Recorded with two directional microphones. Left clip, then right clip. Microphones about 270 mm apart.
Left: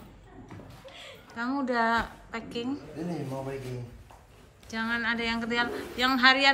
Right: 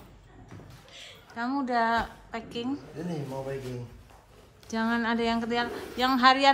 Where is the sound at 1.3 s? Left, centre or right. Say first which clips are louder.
Right 1 dB; centre.